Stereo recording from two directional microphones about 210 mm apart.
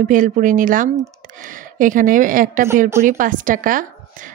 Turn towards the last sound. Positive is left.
turn(degrees=-40)  # may be behind; listen again after turning